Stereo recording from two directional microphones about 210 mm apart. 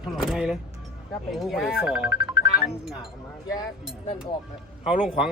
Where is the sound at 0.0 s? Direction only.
Centre (ahead or behind).